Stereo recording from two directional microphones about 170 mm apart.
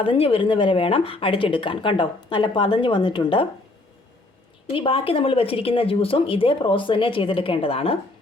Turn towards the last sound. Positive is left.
turn(degrees=35)  # may be behind; listen again after turning